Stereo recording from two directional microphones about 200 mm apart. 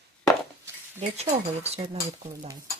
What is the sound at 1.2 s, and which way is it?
Speech, 30° right (ahead or behind).